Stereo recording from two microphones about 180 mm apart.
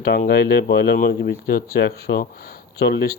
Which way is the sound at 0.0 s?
60° left (ahead or behind).